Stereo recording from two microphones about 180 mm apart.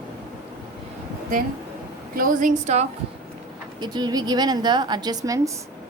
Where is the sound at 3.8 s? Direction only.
25° right (ahead or behind).